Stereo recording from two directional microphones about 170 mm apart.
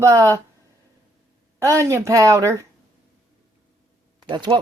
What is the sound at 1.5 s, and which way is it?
A woman's voice, 15° right (ahead or behind).